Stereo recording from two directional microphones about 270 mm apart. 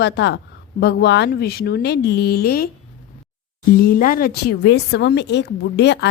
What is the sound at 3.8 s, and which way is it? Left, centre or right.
A woman's voice, left.